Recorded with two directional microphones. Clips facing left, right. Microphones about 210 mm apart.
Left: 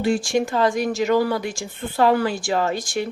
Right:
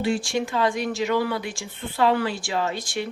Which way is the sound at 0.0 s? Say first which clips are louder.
Left 4 dB; 45° left (ahead or behind).